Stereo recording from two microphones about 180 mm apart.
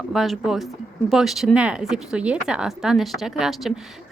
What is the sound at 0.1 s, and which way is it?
Speech, centre (ahead or behind).